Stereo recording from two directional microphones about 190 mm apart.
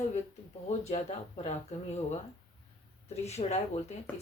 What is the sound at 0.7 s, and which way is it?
Speech, 35° left (ahead or behind).